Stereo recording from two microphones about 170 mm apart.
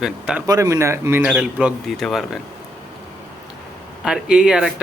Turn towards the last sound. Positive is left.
turn(degrees=-5)  # may be behind; listen again after turning